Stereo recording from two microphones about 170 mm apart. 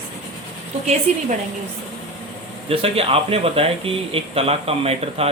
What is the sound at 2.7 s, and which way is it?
Speech, 35° right (ahead or behind).